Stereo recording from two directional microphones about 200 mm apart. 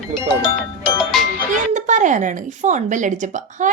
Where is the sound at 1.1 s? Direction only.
Centre (ahead or behind).